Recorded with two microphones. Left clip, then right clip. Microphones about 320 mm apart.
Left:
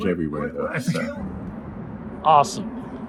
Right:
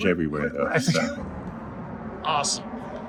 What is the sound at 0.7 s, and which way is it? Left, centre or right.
Speech, centre.